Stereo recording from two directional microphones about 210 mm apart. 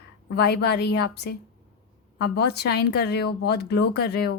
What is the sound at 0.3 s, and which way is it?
A woman's voice, 50° left (ahead or behind).